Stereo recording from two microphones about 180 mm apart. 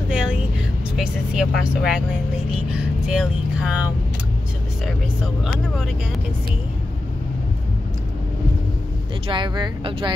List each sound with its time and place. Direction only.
0.1 s vehicle: 5° right (ahead or behind)
0.9 s speech: 5° right (ahead or behind)
9.3 s speech: 25° right (ahead or behind)